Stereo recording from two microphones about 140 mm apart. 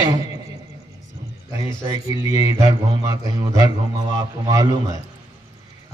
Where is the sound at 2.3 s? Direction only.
30° right (ahead or behind).